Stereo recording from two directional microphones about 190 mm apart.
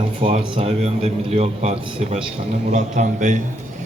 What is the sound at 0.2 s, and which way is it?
A man's voice, 30° right (ahead or behind).